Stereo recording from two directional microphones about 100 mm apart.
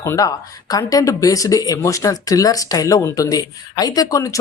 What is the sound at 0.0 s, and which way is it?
Speech, 35° left (ahead or behind).